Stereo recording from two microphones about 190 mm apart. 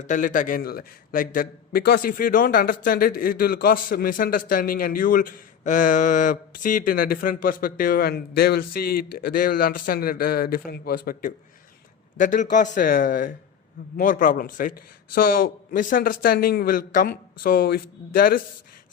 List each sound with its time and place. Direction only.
0.0 s a man's voice: 40° left (ahead or behind)